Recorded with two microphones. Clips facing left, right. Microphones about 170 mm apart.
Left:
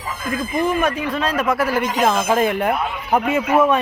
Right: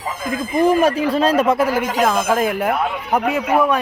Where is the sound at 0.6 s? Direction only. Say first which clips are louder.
Right 6 dB; 35° right (ahead or behind).